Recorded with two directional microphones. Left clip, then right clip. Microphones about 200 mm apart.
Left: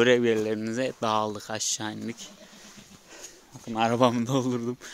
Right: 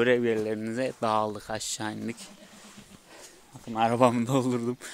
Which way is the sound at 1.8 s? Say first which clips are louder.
Even; 5° right (ahead or behind).